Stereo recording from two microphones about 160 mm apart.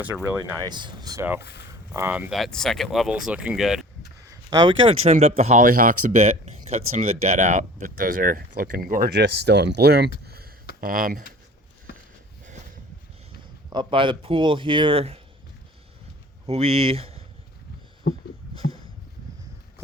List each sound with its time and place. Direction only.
0.6 s speech: 30° right (ahead or behind)
1.2 s speech: 10° right (ahead or behind)
4.3 s speech: 25° right (ahead or behind)
5.0 s speech: 40° right (ahead or behind); by 10.1 s 85° right
10.2 s a sound: 75° right (ahead or behind)
10.8 s speech: 60° right (ahead or behind)
13.7 s speech: 30° right (ahead or behind)
16.5 s speech: 40° right (ahead or behind)
18.0 s a sound: 70° left (ahead or behind)